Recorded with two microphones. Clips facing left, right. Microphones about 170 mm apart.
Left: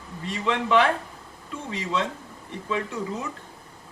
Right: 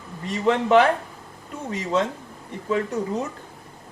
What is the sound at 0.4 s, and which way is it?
Speech, 45° right (ahead or behind).